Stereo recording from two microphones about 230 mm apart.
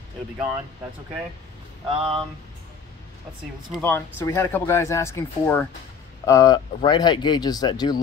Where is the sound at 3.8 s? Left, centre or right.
Centre.